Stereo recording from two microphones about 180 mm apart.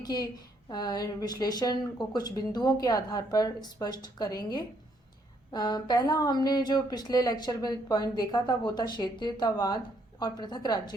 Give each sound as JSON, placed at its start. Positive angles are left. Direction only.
{"t": 0.0, "sound": "a woman's voice", "side_deg": 20}